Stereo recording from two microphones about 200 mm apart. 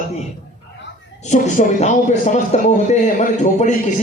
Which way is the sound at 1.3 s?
35° left (ahead or behind).